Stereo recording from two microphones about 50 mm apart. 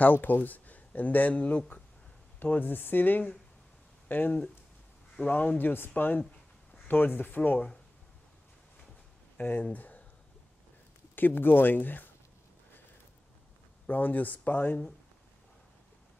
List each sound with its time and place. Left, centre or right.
0.0 s a man's voice: left
9.4 s speech: left
11.1 s speech: left
13.8 s speech: left